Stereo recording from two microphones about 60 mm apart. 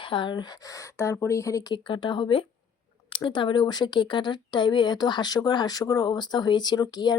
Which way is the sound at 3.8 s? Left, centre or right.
Left.